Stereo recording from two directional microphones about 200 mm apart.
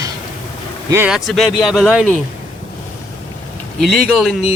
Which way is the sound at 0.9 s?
5° right (ahead or behind).